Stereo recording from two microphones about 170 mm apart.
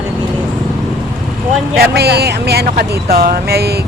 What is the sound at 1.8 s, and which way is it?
Speech, 70° right (ahead or behind).